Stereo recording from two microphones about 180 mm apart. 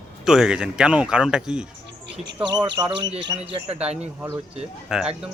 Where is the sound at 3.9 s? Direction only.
35° right (ahead or behind).